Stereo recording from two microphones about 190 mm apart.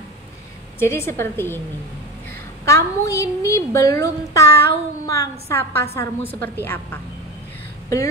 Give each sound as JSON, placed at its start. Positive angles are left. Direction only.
{"t": 0.7, "sound": "a child's voice", "side_deg": 15}
{"t": 2.6, "sound": "a child's voice", "side_deg": 15}